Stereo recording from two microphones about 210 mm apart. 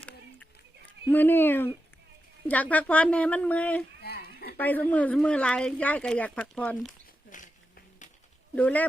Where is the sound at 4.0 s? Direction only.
45° left (ahead or behind).